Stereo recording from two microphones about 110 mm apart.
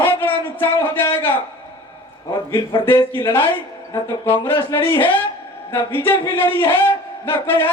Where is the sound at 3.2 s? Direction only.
20° left (ahead or behind).